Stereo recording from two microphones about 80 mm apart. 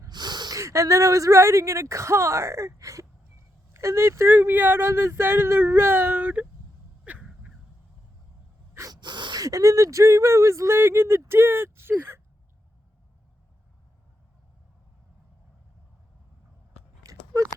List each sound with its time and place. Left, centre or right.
0.1 s snort: right
0.5 s speech: right; by 6.5 s centre
7.0 s a sound: centre
8.9 s gasp: right
9.4 s speech: right
17.1 s a sound: right